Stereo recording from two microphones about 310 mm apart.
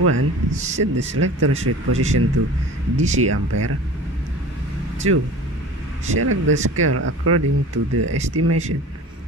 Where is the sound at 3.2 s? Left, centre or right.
Right.